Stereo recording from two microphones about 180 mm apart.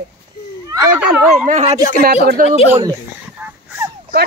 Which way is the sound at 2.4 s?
50° right (ahead or behind).